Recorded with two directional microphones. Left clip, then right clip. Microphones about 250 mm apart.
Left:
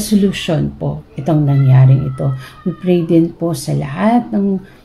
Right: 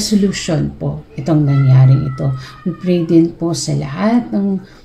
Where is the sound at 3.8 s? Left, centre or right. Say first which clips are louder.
Left 4 dB; right.